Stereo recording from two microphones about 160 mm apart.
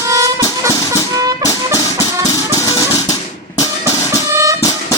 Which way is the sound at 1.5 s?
20° left (ahead or behind).